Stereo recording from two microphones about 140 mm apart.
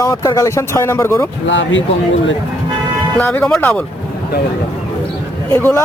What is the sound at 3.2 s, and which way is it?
Speech, 10° left (ahead or behind).